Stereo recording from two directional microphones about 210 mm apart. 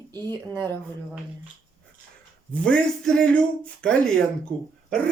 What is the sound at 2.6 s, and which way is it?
A man's voice, 5° left (ahead or behind).